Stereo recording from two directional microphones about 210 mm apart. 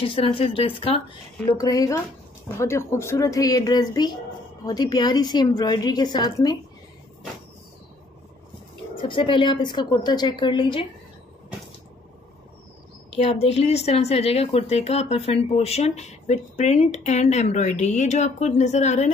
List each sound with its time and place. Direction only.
0.0 s a woman's voice: 25° left (ahead or behind)
9.0 s a woman's voice: 25° left (ahead or behind)
13.1 s a woman's voice: 30° left (ahead or behind)